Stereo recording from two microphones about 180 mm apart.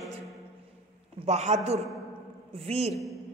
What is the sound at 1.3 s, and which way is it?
Speech, 40° right (ahead or behind).